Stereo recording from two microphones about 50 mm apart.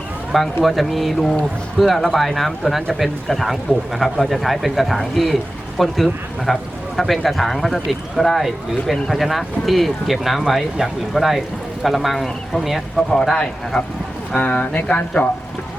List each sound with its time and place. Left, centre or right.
0.3 s speech: centre
13.3 s speech: centre